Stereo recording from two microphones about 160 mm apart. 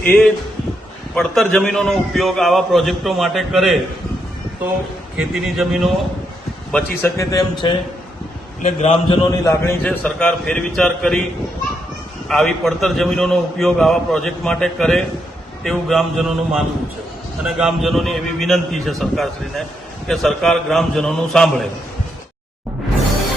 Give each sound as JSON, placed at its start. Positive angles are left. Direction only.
{"t": 1.1, "sound": "a man's voice", "side_deg": 5}
{"t": 5.1, "sound": "a man's voice", "side_deg": 0}
{"t": 7.2, "sound": "speech", "side_deg": 20}
{"t": 8.6, "sound": "a man's voice", "side_deg": 40}
{"t": 9.3, "sound": "speech", "side_deg": 20}
{"t": 9.8, "sound": "a man's voice", "side_deg": 5}
{"t": 12.3, "sound": "a man's voice", "side_deg": 0}